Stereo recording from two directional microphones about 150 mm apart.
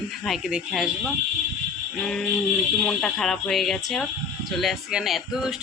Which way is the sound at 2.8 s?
5° left (ahead or behind).